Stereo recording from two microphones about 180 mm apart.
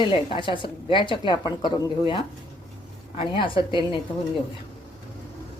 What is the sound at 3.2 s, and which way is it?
Speech, 30° left (ahead or behind).